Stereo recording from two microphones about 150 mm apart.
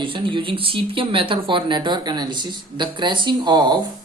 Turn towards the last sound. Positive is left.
turn(degrees=-30)  # may be behind; listen again after turning